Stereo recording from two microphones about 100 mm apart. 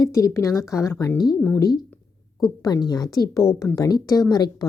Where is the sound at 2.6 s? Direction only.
40° left (ahead or behind).